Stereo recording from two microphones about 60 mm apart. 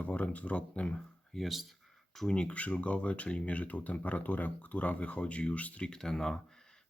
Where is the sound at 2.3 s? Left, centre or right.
Left.